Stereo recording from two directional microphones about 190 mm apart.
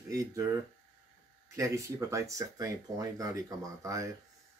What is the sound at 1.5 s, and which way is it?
Speech, 15° right (ahead or behind).